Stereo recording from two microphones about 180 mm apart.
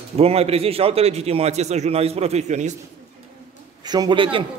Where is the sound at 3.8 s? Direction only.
20° right (ahead or behind).